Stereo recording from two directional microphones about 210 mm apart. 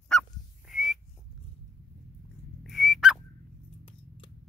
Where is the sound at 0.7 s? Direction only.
Centre (ahead or behind).